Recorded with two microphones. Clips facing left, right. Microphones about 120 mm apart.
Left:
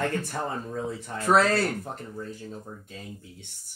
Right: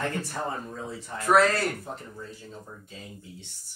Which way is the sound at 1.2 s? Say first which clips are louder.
Right 1 dB; 30° left (ahead or behind).